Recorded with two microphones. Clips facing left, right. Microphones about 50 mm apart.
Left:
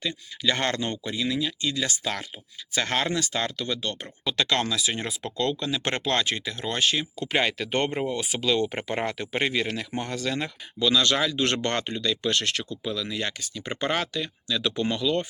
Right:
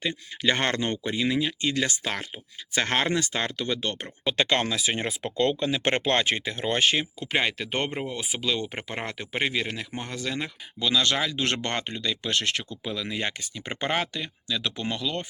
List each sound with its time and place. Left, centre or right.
0.0 s speech: right
7.3 s speech: centre